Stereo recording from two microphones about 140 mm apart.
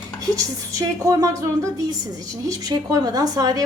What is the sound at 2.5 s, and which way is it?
A woman's voice, 25° right (ahead or behind).